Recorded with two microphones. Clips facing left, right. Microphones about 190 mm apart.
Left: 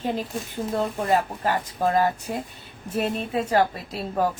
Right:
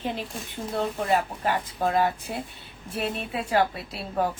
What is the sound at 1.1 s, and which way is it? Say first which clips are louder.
A woman's voice: left 2 dB; 40° left (ahead or behind).